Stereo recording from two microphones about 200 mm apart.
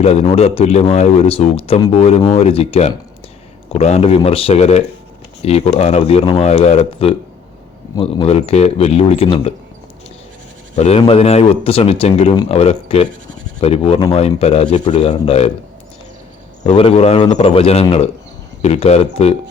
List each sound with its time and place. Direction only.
0.0 s speech: 30° left (ahead or behind)
10.8 s speech: 30° left (ahead or behind)
16.6 s speech: 30° left (ahead or behind)